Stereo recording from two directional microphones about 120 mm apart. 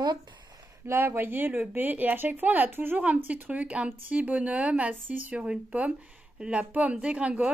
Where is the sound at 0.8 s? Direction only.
20° right (ahead or behind).